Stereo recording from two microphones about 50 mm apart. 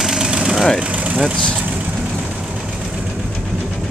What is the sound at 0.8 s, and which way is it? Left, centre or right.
Vehicle, right.